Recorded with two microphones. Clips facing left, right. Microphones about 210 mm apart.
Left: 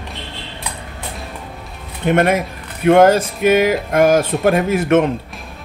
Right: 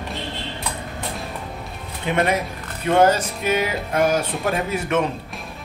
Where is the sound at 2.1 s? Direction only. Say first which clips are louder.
Left 6 dB; 50° left (ahead or behind).